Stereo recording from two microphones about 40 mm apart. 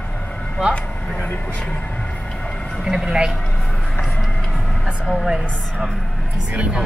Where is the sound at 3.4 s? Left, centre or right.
Centre.